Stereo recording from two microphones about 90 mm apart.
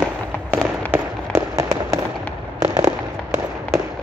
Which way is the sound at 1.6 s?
35° right (ahead or behind).